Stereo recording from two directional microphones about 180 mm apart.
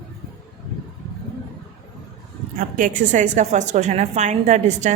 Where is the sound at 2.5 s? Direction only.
45° right (ahead or behind).